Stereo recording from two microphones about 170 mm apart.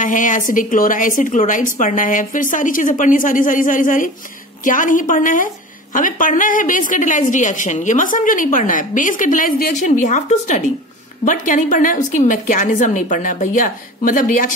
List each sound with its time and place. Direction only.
0.0 s a woman's voice: 50° left (ahead or behind)